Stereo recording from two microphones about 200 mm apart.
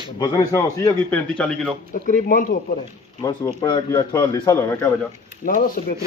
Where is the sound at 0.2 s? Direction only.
20° left (ahead or behind).